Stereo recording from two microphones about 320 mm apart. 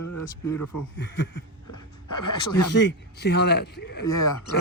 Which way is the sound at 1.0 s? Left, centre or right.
Left.